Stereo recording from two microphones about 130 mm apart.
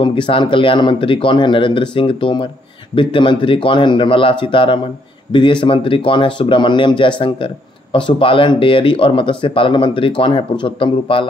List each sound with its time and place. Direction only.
0.0 s speech: 40° left (ahead or behind)